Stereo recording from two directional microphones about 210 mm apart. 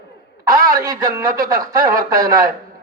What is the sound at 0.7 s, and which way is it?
A man's voice, 15° right (ahead or behind).